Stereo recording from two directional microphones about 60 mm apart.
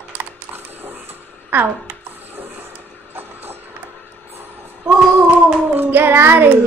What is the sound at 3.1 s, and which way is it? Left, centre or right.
Music, right.